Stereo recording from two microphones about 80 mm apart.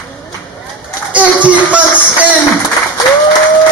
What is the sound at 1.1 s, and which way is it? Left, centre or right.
Speech, centre.